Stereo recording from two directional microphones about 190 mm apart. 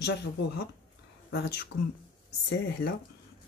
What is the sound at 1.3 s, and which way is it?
Speech, 60° left (ahead or behind).